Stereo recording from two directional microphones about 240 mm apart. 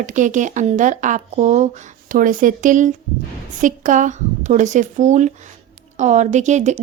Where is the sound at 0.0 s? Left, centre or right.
Right.